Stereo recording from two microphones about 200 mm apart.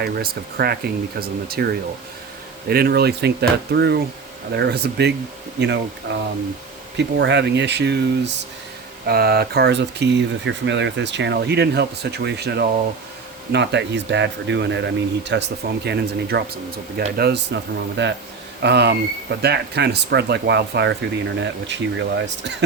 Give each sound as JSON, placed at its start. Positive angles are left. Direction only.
{"t": 0.0, "sound": "speech", "side_deg": -50}